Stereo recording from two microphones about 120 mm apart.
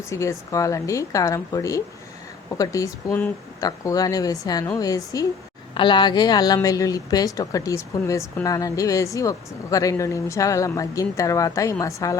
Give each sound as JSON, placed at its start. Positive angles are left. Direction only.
{"t": 0.1, "sound": "speech", "side_deg": 25}
{"t": 5.7, "sound": "speech", "side_deg": 40}